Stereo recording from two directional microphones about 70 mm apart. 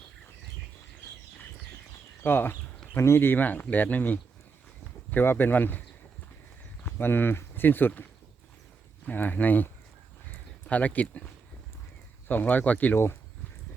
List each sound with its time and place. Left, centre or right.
2.2 s speech: left
6.8 s speech: left
9.0 s speech: left
10.7 s speech: left
12.3 s speech: left